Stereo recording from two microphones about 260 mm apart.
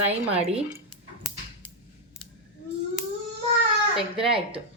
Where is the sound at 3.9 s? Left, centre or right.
Centre.